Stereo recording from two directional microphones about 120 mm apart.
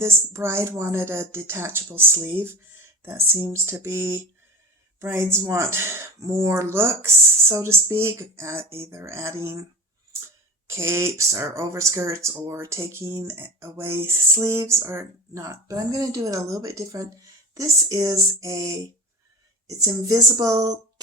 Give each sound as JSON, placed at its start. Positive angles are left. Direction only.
{"t": 0.0, "sound": "speech", "side_deg": -20}
{"t": 10.7, "sound": "speech", "side_deg": -20}